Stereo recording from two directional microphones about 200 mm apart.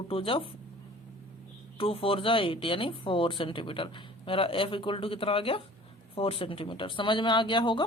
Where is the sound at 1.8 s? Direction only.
30° left (ahead or behind).